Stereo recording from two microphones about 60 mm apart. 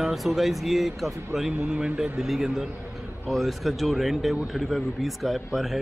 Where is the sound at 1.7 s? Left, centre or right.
Centre.